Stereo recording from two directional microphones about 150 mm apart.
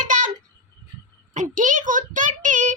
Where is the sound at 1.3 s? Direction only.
55° right (ahead or behind).